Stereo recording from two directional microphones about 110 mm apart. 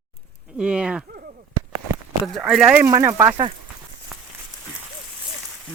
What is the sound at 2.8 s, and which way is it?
Speech, 25° right (ahead or behind).